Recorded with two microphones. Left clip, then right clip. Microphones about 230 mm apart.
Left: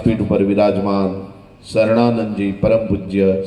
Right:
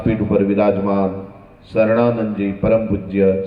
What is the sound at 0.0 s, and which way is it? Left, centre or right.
A man's voice, left.